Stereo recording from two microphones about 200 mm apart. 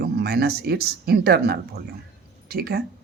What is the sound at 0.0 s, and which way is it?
Speech, 50° right (ahead or behind).